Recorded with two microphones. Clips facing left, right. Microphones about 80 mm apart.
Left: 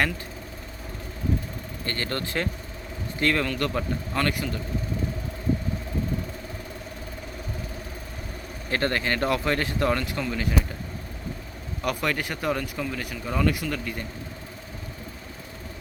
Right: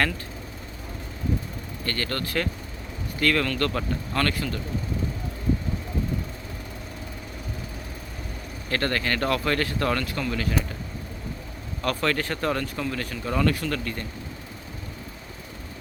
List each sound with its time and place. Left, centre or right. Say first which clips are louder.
1.8 s speech: right 1 dB; left
8.7 s speech: even; left
11.8 s speech: right 2 dB; centre